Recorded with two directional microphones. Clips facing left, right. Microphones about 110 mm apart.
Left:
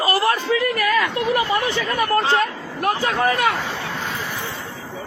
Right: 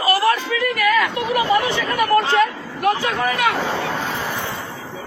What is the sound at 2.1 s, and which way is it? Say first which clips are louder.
Speech: right 4 dB; 35° left (ahead or behind).